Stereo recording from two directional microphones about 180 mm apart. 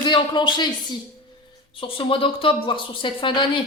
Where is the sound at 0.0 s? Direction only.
25° left (ahead or behind).